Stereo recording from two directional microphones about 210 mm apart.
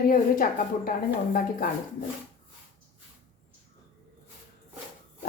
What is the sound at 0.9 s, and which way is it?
Speech, 40° left (ahead or behind).